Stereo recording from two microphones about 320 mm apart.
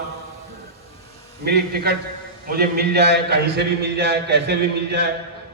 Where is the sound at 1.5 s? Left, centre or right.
Right.